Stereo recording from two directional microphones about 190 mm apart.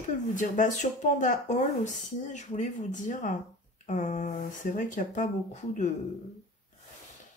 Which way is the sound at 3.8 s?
40° left (ahead or behind).